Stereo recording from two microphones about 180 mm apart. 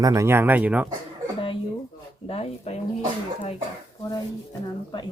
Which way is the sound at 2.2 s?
35° left (ahead or behind).